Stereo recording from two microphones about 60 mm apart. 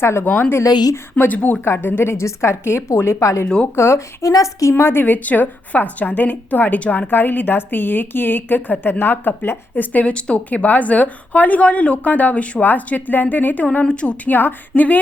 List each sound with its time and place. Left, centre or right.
0.0 s a woman's voice: left
0.3 s a woman's voice: left
1.6 s a woman's voice: left
4.2 s a woman's voice: left
4.8 s a woman's voice: left
7.1 s a woman's voice: left
13.7 s a woman's voice: centre
14.3 s a woman's voice: left